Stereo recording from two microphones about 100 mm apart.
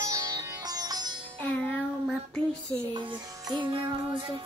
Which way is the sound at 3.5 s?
50° right (ahead or behind).